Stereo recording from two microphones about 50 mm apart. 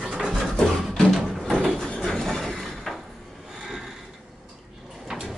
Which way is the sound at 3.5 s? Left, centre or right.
Centre.